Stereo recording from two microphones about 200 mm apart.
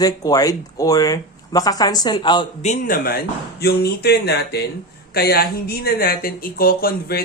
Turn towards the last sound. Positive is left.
turn(degrees=50)  # may be behind; listen again after turning